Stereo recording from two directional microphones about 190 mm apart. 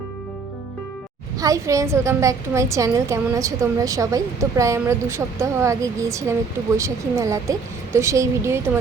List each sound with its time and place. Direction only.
1.4 s a woman's voice: 15° right (ahead or behind)